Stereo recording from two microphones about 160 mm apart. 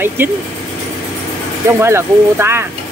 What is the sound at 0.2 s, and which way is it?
Speech, 15° right (ahead or behind).